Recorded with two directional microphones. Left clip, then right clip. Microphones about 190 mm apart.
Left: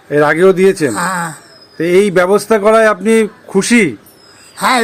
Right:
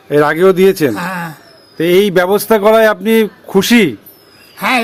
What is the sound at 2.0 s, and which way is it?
A man's voice, 10° right (ahead or behind).